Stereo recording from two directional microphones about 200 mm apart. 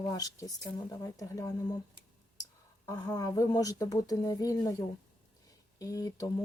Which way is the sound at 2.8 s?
20° left (ahead or behind).